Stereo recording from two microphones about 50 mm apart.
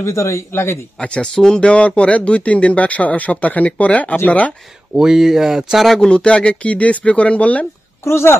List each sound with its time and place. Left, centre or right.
0.0 s a man's voice: left
1.0 s speech: left
1.3 s speech: centre
1.6 s speech: left
4.9 s speech: centre
5.9 s speech: left
8.0 s speech: left